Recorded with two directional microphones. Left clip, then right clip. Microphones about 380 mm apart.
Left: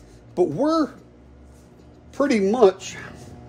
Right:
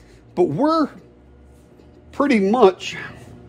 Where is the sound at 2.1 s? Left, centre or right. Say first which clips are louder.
Right 3 dB; centre.